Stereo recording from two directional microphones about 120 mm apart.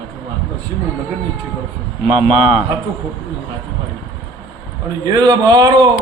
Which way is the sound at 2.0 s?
50° right (ahead or behind).